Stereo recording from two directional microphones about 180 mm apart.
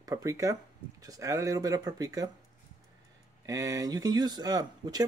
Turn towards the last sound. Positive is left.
turn(degrees=-20)  # may be behind; listen again after turning